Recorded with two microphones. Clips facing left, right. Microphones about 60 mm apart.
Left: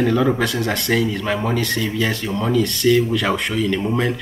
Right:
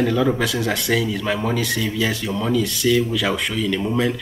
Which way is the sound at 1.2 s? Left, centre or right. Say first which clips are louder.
Left 1 dB; centre.